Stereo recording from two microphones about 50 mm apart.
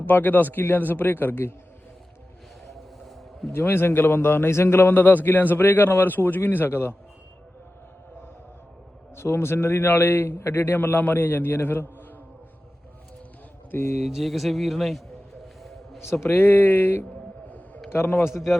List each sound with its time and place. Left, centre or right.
0.1 s a man's voice: left
3.5 s a man's voice: left
4.9 s a man's voice: left
9.1 s a man's voice: left
10.7 s a man's voice: left
14.0 s speech: centre
16.2 s a man's voice: left